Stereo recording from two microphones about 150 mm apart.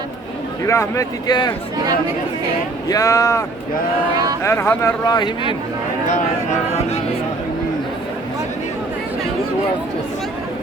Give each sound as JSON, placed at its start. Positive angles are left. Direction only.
{"t": 0.6, "sound": "speech", "side_deg": 20}
{"t": 2.9, "sound": "speech", "side_deg": 20}
{"t": 4.1, "sound": "speech", "side_deg": -25}
{"t": 4.4, "sound": "speech", "side_deg": 15}
{"t": 5.0, "sound": "speech", "side_deg": 30}
{"t": 6.1, "sound": "speech", "side_deg": 50}